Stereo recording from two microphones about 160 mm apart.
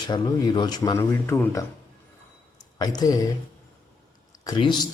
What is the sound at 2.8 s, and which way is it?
Speech, 25° left (ahead or behind).